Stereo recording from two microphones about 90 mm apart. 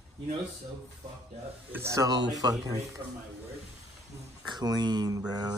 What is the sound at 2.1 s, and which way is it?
Speech, 45° right (ahead or behind).